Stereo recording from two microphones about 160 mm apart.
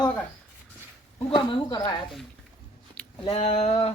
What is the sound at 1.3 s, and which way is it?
Speech, 30° left (ahead or behind).